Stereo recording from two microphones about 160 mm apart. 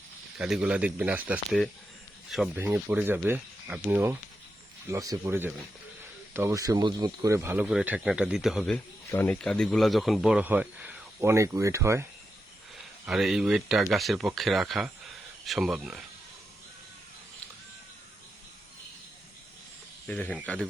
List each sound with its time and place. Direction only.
0.3 s speech: 5° right (ahead or behind)
2.6 s speech: 10° right (ahead or behind)
9.0 s speech: 15° left (ahead or behind); by 12.0 s 15° right (ahead or behind)
13.1 s speech: centre (ahead or behind)
20.1 s speech: 10° left (ahead or behind)